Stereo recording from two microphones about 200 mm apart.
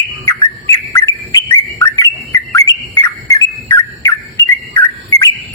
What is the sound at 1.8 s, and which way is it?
Bird, 15° left (ahead or behind).